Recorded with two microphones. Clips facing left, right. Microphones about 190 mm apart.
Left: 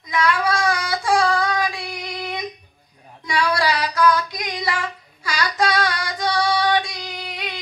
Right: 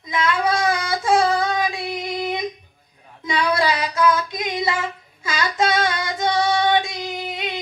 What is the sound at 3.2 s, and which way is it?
Child singing, 20° right (ahead or behind).